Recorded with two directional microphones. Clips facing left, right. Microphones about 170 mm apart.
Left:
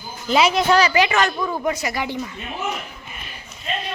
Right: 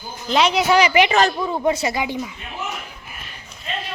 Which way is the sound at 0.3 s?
5° left (ahead or behind).